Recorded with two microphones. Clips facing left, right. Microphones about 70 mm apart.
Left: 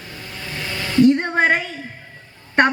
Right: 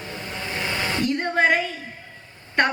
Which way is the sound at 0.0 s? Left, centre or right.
Right.